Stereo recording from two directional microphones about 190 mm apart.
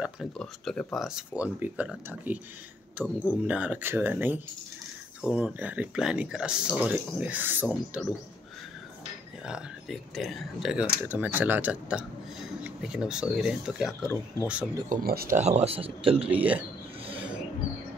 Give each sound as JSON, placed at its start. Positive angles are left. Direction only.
{"t": 0.0, "sound": "speech", "side_deg": 0}
{"t": 9.4, "sound": "speech", "side_deg": -5}
{"t": 14.0, "sound": "speech", "side_deg": 15}
{"t": 14.9, "sound": "speech", "side_deg": -50}
{"t": 16.3, "sound": "speech", "side_deg": -10}